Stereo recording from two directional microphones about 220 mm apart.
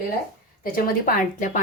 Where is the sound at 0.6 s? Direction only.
40° left (ahead or behind).